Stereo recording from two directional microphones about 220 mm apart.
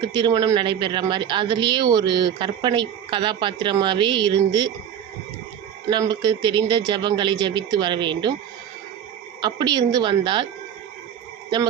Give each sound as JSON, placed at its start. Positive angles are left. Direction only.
{"t": 0.1, "sound": "speech", "side_deg": -20}
{"t": 5.9, "sound": "speech", "side_deg": -20}
{"t": 9.4, "sound": "speech", "side_deg": -20}